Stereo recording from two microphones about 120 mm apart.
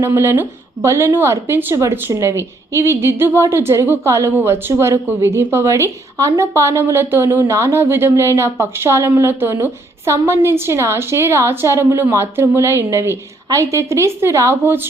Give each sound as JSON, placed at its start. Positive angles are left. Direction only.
{"t": 0.0, "sound": "a woman's voice", "side_deg": -25}